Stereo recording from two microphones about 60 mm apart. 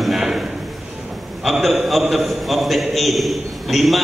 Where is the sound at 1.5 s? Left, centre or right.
Centre.